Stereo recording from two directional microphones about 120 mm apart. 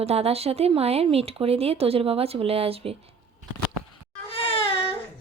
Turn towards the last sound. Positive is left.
turn(degrees=50)  # may be behind; listen again after turning